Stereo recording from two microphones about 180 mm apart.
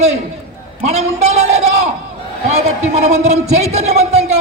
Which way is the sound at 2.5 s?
40° right (ahead or behind).